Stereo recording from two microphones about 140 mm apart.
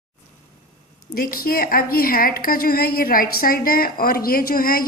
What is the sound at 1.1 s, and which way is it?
A woman's voice, 90° left.